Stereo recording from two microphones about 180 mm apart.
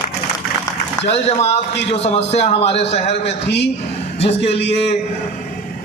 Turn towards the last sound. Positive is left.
turn(degrees=35)  # may be behind; listen again after turning